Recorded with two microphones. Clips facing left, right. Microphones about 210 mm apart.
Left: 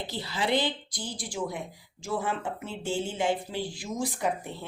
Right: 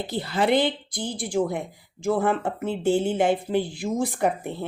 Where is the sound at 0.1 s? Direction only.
55° right (ahead or behind).